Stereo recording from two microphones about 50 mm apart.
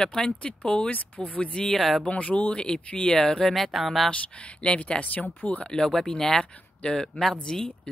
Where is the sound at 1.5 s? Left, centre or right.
Centre.